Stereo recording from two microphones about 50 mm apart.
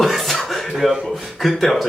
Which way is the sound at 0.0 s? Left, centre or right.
Centre.